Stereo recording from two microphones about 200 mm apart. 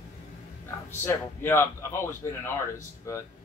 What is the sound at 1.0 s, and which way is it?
A man's voice, 10° left (ahead or behind).